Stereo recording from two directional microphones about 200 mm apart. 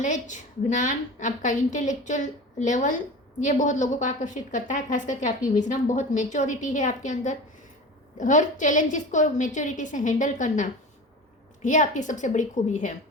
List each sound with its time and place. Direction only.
0.0 s a woman's voice: 40° left (ahead or behind)